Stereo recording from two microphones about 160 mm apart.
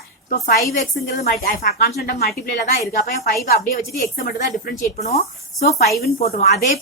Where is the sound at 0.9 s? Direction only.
70° left (ahead or behind).